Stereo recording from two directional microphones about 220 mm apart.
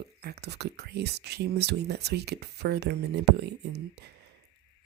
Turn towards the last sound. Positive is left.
turn(degrees=-50)  # may be behind; listen again after turning